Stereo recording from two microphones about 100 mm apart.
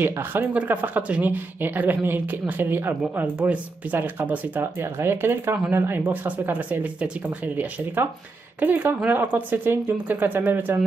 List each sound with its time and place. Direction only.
0.0 s speech: 20° right (ahead or behind)